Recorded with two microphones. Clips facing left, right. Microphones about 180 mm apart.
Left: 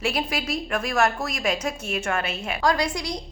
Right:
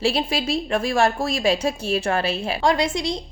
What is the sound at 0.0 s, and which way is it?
A woman's voice, 30° right (ahead or behind).